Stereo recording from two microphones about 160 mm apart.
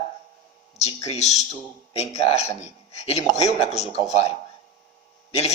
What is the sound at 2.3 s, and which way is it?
A man's voice, 40° left (ahead or behind).